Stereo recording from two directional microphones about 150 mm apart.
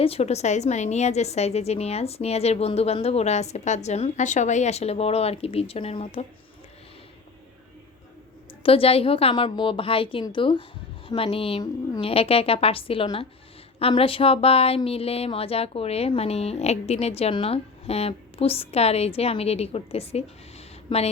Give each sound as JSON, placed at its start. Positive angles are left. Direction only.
{"t": 0.0, "sound": "a woman's voice", "side_deg": 40}
{"t": 8.6, "sound": "a woman's voice", "side_deg": 40}